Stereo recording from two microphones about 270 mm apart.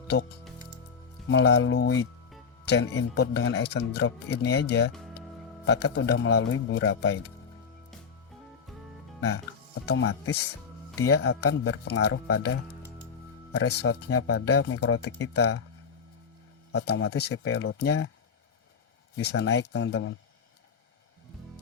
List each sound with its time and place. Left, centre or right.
1.3 s speech: left
9.8 s speech: left
13.5 s speech: left
14.3 s speech: left
16.7 s speech: left
19.1 s speech: left